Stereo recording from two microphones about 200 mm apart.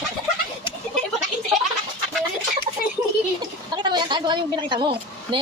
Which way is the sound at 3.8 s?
20° right (ahead or behind).